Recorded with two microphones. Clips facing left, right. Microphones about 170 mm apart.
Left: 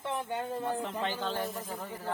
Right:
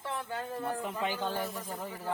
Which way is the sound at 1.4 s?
Centre (ahead or behind).